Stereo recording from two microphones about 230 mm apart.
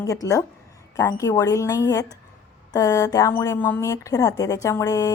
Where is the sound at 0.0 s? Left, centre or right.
Centre.